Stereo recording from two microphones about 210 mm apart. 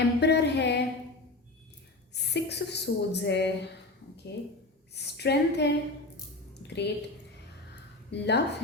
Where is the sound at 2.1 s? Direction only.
55° left (ahead or behind).